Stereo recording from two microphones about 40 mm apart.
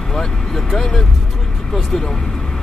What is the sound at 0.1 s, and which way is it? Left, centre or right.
Speech, centre.